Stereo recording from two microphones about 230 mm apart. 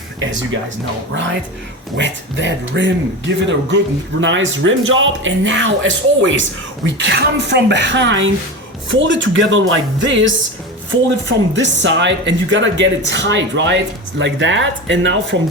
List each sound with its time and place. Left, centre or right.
2.0 s speech: right
11.5 s speech: right